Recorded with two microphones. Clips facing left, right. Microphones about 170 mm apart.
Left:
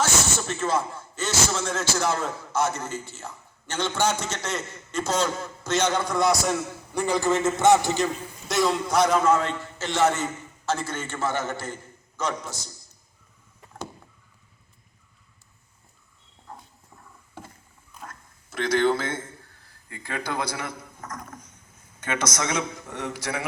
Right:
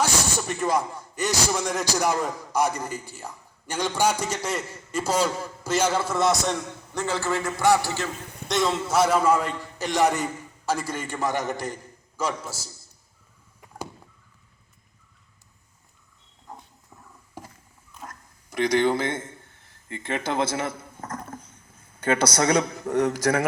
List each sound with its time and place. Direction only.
0.0 s speech: 15° right (ahead or behind)
6.9 s a man's voice: 15° left (ahead or behind)
8.4 s speech: centre (ahead or behind)
16.5 s a sound: 20° right (ahead or behind)
18.0 s a sound: 15° right (ahead or behind); by 21.6 s 30° right (ahead or behind)
22.0 s speech: 30° right (ahead or behind)